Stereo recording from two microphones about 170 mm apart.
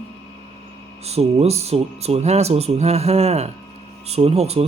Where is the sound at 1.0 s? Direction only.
40° right (ahead or behind).